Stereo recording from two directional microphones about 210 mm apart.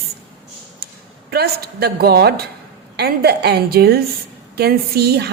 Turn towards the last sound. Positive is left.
turn(degrees=-50)  # may be behind; listen again after turning